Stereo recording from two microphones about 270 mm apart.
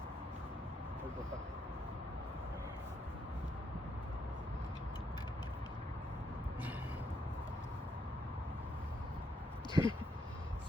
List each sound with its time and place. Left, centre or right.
9.8 s speech: centre